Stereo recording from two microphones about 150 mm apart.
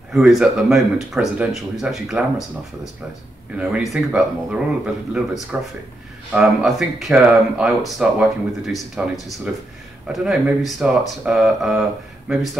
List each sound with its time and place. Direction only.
0.1 s speech: centre (ahead or behind)
3.5 s speech: 10° right (ahead or behind)